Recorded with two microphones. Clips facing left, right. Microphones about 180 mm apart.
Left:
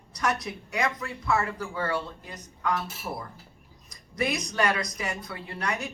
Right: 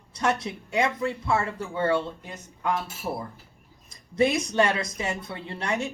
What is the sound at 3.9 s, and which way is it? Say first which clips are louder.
Speech: right 6 dB; 25° right (ahead or behind).